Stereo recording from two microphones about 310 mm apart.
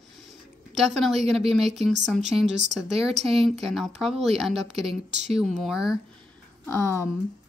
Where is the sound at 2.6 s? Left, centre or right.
Right.